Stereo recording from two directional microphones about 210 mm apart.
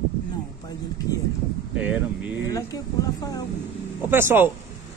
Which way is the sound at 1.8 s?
5° right (ahead or behind).